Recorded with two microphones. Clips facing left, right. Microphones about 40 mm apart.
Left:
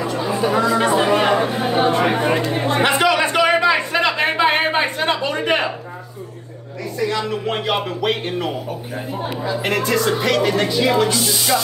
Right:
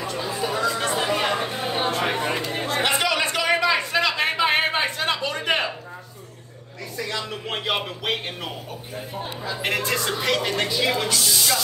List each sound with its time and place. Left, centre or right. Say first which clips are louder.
0.5 s speech: left 7 dB; centre
0.7 s chatter: left 8 dB; left
1.5 s a sound: left 7 dB; left
2.1 s speech: left 7 dB; left
2.8 s a sound: left 6 dB; centre
7.0 s speech: left 8 dB; centre
9.6 s speech: left 5 dB; centre
11.1 s speech: left 4 dB; left